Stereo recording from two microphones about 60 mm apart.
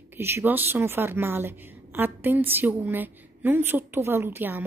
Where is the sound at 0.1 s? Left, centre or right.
Right.